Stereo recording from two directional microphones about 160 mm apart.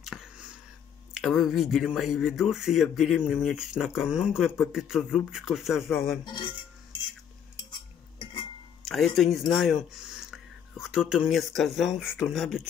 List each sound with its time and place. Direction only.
0.0 s a sound: centre (ahead or behind)
1.1 s speech: centre (ahead or behind)
6.2 s speech: 30° left (ahead or behind)
8.8 s speech: centre (ahead or behind)